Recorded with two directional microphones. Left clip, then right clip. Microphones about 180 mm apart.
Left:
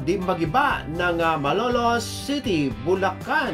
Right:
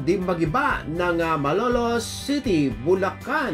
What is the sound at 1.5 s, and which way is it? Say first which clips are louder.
Speech: left 1 dB; 45° left (ahead or behind).